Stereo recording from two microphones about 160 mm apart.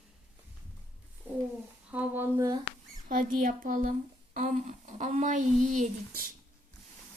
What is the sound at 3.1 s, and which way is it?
Speech, 55° right (ahead or behind).